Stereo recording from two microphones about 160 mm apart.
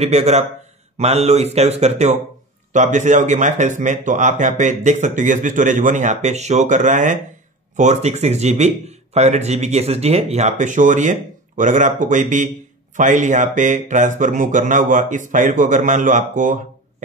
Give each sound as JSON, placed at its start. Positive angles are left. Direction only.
{"t": 0.0, "sound": "speech", "side_deg": -40}